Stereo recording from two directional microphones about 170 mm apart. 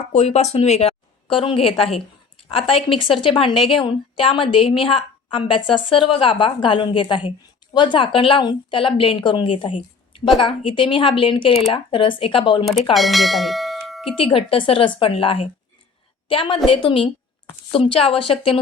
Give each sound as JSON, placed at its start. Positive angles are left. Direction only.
{"t": 0.1, "sound": "a woman's voice", "side_deg": 40}
{"t": 12.6, "sound": "speech", "side_deg": 0}
{"t": 14.2, "sound": "a woman's voice", "side_deg": 30}